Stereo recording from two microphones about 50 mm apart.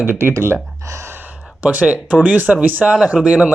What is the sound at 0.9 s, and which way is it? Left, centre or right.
Gasp, right.